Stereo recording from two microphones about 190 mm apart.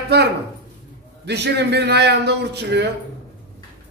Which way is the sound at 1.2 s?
60° right (ahead or behind).